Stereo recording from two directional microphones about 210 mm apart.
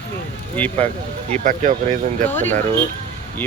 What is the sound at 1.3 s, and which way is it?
Speech, 40° right (ahead or behind).